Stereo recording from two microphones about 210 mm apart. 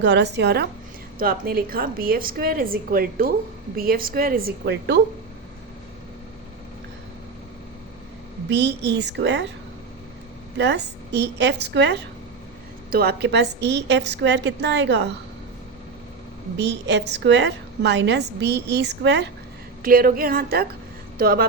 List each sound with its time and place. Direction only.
0.0 s a woman's voice: 55° right (ahead or behind)
8.4 s a woman's voice: 55° right (ahead or behind)
10.6 s a woman's voice: 55° right (ahead or behind)
16.6 s a woman's voice: 55° right (ahead or behind)
19.8 s a woman's voice: 45° right (ahead or behind)